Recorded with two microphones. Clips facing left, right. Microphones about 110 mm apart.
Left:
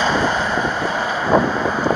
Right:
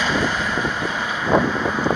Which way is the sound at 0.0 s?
35° left (ahead or behind).